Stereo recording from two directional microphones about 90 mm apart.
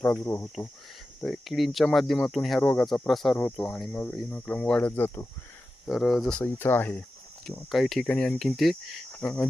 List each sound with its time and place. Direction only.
0.0 s speech: 10° left (ahead or behind)
0.3 s speech: 30° left (ahead or behind)
1.2 s speech: centre (ahead or behind)
4.3 s speech: 15° left (ahead or behind)
4.9 s speech: 25° left (ahead or behind)
5.9 s speech: centre (ahead or behind)
6.4 s speech: 25° left (ahead or behind)
7.7 s speech: centre (ahead or behind)
9.1 s cricket: 15° left (ahead or behind)